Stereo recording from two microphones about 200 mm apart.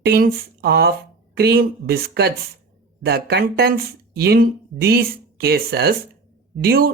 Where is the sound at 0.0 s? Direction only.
50° right (ahead or behind).